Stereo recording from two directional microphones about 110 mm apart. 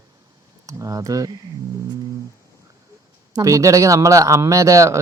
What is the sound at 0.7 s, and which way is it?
Speech, 30° right (ahead or behind).